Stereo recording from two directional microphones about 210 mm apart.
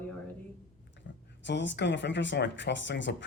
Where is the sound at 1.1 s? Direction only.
55° left (ahead or behind).